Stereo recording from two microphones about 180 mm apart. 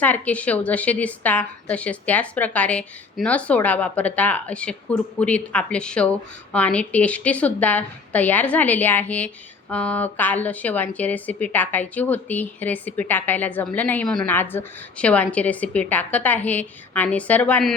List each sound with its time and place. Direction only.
0.0 s a woman's voice: 10° left (ahead or behind)